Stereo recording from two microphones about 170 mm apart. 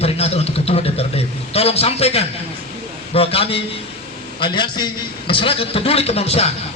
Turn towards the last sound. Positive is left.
turn(degrees=35)  # may be behind; listen again after turning